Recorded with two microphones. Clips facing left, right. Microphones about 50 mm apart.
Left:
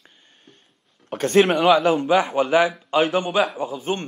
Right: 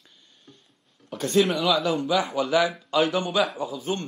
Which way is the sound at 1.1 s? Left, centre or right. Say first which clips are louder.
Left 5 dB; left.